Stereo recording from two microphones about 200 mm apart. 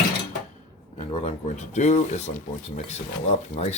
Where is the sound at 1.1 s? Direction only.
30° left (ahead or behind).